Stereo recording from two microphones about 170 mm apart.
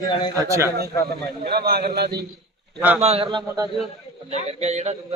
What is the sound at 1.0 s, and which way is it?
A man's voice, 65° right (ahead or behind).